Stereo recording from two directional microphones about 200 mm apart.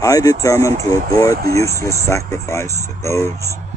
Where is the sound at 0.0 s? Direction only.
15° left (ahead or behind).